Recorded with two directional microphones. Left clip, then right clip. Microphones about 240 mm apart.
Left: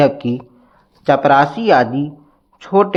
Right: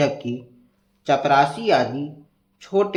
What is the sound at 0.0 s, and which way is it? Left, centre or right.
Speech, left.